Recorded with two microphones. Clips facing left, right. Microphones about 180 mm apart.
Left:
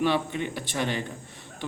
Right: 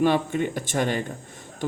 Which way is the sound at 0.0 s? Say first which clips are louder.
Right 4 dB; 45° right (ahead or behind).